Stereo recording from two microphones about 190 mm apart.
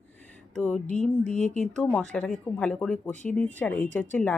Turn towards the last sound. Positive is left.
turn(degrees=10)  # may be behind; listen again after turning